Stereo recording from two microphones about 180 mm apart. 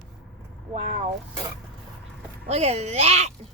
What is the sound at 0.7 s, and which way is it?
Speech, 40° right (ahead or behind).